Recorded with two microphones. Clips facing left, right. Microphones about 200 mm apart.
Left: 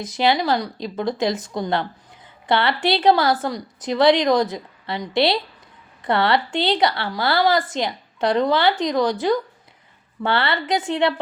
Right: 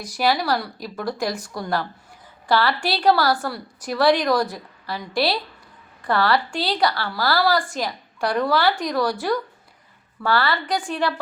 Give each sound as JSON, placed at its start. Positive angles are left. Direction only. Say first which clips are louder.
{"t": 0.0, "sound": "a woman's voice", "louder": "left 2 dB", "side_deg": 20}